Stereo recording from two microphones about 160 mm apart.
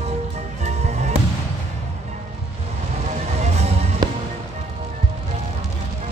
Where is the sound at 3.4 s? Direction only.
40° right (ahead or behind).